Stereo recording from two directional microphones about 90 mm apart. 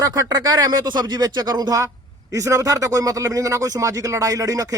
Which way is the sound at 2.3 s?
35° right (ahead or behind).